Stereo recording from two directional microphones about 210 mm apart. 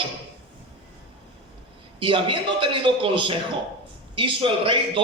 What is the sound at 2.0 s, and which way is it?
A man's voice, 25° right (ahead or behind).